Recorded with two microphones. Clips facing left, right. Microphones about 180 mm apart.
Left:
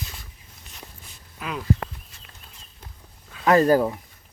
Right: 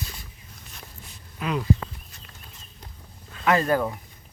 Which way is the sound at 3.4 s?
35° left (ahead or behind).